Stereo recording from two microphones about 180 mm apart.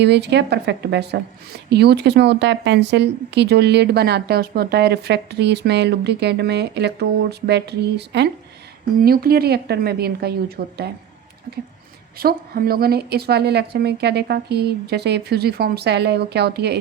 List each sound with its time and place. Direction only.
0.0 s speech: 70° right (ahead or behind)
9.0 s a woman's voice: 60° right (ahead or behind)
12.1 s a woman's voice: 55° right (ahead or behind)